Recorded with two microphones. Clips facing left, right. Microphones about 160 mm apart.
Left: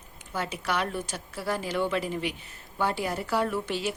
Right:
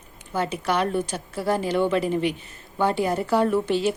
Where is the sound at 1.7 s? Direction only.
45° right (ahead or behind).